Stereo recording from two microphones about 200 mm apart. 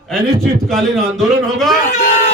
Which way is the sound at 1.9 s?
40° left (ahead or behind).